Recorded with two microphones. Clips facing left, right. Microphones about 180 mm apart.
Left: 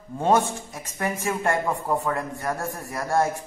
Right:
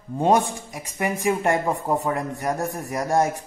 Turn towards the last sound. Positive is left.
turn(degrees=-20)  # may be behind; listen again after turning